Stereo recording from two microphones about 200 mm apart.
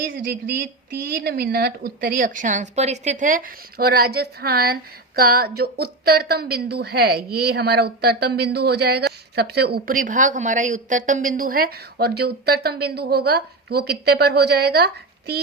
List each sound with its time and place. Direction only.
0.0 s a woman's voice: 50° right (ahead or behind)